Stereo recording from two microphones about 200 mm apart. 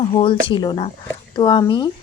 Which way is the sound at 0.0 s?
25° left (ahead or behind).